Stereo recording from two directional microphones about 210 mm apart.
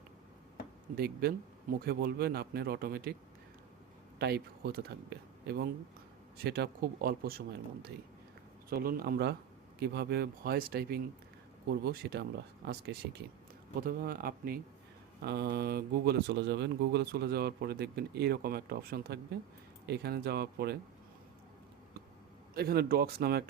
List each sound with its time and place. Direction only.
0.9 s speech: 45° right (ahead or behind)
4.2 s speech: 50° right (ahead or behind)
22.5 s speech: 50° right (ahead or behind)